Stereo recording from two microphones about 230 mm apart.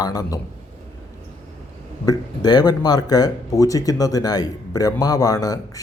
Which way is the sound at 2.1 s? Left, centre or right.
Centre.